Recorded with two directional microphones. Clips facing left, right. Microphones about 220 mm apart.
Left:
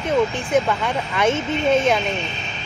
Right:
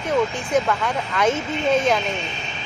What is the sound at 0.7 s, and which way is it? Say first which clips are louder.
Speech: left 1 dB; 5° left (ahead or behind).